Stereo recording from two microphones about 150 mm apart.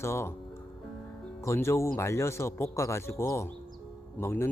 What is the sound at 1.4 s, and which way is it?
Speech, 20° left (ahead or behind).